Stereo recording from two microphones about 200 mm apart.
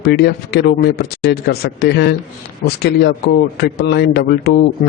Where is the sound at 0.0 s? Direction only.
55° left (ahead or behind).